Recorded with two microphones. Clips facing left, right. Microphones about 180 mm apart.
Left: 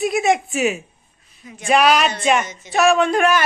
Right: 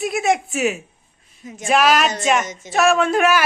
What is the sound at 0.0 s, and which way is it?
Speech, centre (ahead or behind).